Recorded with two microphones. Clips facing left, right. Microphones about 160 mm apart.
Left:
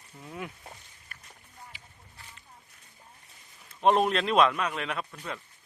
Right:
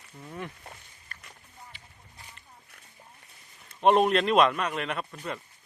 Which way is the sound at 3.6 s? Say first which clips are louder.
Right 2 dB; centre (ahead or behind).